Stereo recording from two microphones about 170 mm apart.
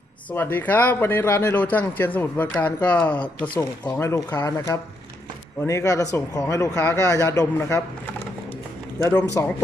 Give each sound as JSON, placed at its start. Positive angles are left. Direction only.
{"t": 0.3, "sound": "speech", "side_deg": 10}
{"t": 9.4, "sound": "speech", "side_deg": 15}